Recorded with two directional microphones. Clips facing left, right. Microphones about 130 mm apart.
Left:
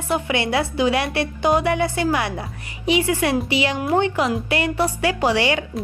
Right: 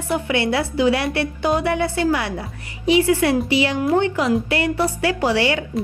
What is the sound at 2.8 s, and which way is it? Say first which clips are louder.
Speech: right 3 dB; 15° left (ahead or behind).